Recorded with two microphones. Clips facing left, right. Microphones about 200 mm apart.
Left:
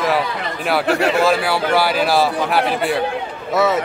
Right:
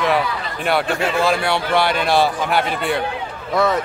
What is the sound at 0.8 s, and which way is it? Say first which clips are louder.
Speech: left 4 dB; 70° left (ahead or behind).